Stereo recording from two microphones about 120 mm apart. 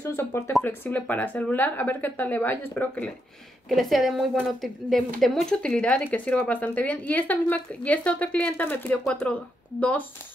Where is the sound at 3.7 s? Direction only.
Centre (ahead or behind).